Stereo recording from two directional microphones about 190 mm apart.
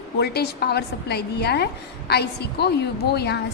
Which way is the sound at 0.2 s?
55° left (ahead or behind).